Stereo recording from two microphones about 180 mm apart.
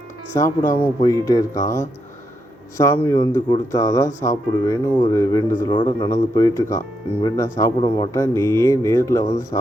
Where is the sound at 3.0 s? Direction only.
15° left (ahead or behind).